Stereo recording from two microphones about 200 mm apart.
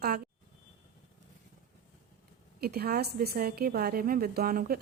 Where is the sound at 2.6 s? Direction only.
50° right (ahead or behind).